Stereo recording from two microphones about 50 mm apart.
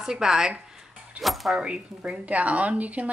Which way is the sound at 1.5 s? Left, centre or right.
Centre.